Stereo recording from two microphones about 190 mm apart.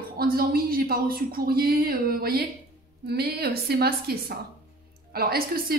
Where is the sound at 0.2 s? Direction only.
50° right (ahead or behind).